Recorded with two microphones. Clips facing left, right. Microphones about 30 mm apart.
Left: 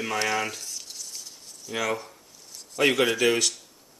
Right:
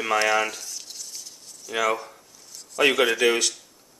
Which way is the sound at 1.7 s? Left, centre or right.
Centre.